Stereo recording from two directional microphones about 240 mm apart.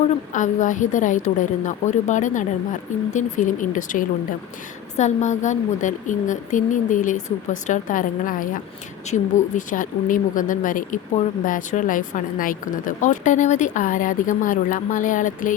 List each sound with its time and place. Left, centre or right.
0.3 s speech: left